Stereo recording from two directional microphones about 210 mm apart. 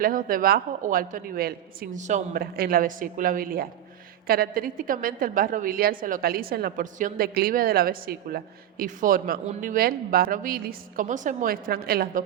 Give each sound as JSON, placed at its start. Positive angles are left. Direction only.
{"t": 0.0, "sound": "a woman's voice", "side_deg": -40}